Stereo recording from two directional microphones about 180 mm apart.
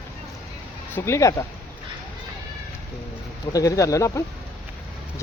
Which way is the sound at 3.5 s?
20° left (ahead or behind).